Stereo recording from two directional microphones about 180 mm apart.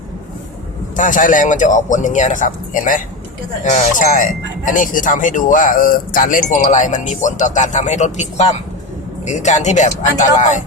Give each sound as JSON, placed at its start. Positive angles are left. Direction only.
{"t": 0.9, "sound": "speech", "side_deg": 50}